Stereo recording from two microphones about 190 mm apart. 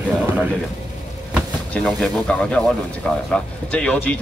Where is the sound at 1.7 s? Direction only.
5° left (ahead or behind).